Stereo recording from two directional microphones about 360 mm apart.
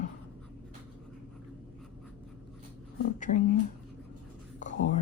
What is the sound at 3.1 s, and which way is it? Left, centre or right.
Speech, centre.